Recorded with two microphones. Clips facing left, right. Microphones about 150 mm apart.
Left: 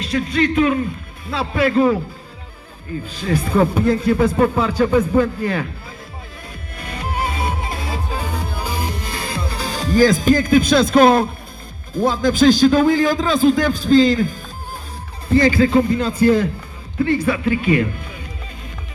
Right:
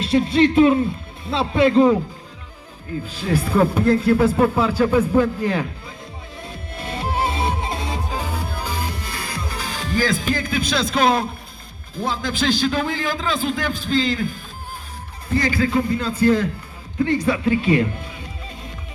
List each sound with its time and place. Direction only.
0.0 s a man's voice: 30° right (ahead or behind)
3.2 s speech: 5° right (ahead or behind)
6.5 s music: 25° right (ahead or behind); by 8.4 s 10° right (ahead or behind)
8.6 s music: 15° left (ahead or behind); by 11.3 s 50° left (ahead or behind)
11.9 s a man's voice: 45° left (ahead or behind)
15.3 s a man's voice: 25° left (ahead or behind)